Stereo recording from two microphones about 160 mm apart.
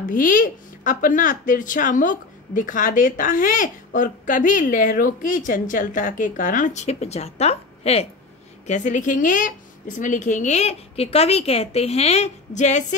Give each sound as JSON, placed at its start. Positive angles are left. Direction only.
{"t": 0.1, "sound": "a woman's voice", "side_deg": 55}